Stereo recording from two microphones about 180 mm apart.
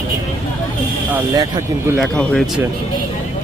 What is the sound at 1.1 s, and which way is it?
Speech, 20° right (ahead or behind).